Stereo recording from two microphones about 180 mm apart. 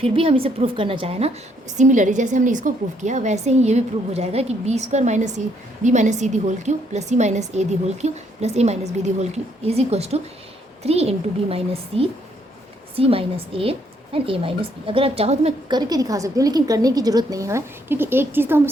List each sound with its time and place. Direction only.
0.0 s a woman's voice: 30° right (ahead or behind)
1.8 s a woman's voice: 45° right (ahead or behind)
15.7 s a woman's voice: 20° right (ahead or behind)